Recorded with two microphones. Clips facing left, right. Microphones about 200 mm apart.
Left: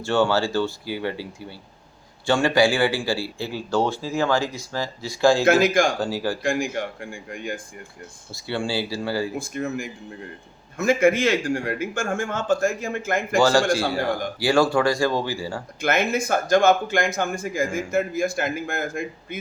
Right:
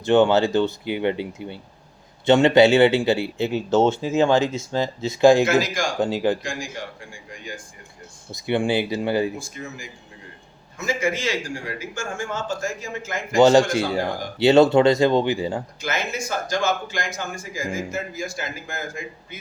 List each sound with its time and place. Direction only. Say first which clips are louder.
0.0 s a man's voice: right 4 dB; 20° right (ahead or behind)
5.5 s speech: left 4 dB; 55° left (ahead or behind)
6.0 s a man's voice: right 4 dB; 20° right (ahead or behind)
6.4 s speech: left 7 dB; 55° left (ahead or behind)
8.3 s a man's voice: right 5 dB; 20° right (ahead or behind)
9.4 s speech: left 8 dB; 55° left (ahead or behind)
13.3 s a man's voice: right 4 dB; 20° right (ahead or behind)
15.8 s speech: left 10 dB; 55° left (ahead or behind)